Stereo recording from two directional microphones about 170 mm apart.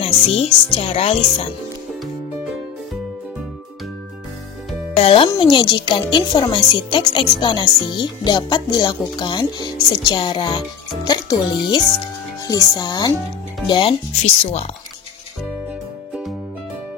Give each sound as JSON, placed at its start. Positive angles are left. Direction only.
{"t": 0.0, "sound": "speech", "side_deg": 35}
{"t": 4.9, "sound": "speech", "side_deg": 35}